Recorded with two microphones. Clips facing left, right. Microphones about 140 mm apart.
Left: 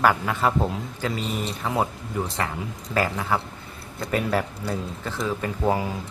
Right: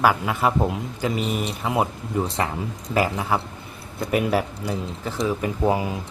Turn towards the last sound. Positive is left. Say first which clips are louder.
# right 2 dB
turn(degrees=-15)  # may be behind; listen again after turning